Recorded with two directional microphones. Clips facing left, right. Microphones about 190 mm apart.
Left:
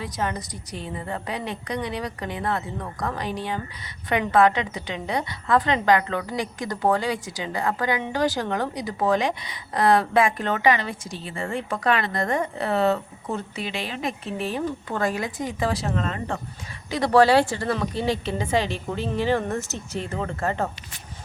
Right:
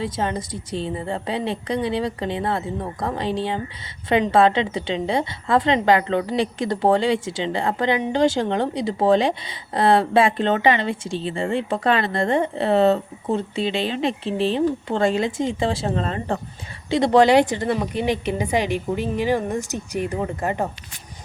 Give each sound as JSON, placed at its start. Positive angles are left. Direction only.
{"t": 0.0, "sound": "a woman's voice", "side_deg": -25}
{"t": 16.9, "sound": "a woman's voice", "side_deg": -20}